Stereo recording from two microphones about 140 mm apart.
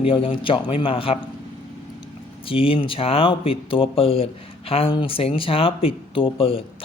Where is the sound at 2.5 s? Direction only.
40° left (ahead or behind).